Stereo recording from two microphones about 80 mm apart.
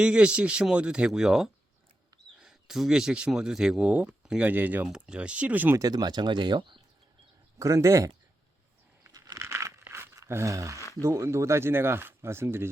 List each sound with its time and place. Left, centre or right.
0.0 s speech: centre
4.2 s a sound: centre
4.4 s speech: right
4.9 s speech: centre
5.7 s speech: right
7.6 s speech: right
9.1 s a sound: right
9.4 s tearing: right
9.8 s a sound: right
11.0 s speech: right